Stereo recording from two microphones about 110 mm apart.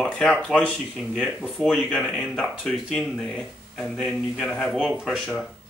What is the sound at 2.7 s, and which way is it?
A man's voice, centre (ahead or behind).